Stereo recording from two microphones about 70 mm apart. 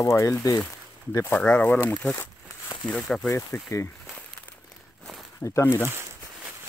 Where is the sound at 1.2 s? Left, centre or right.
Left.